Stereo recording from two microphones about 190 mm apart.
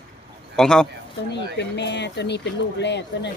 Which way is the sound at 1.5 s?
65° left (ahead or behind).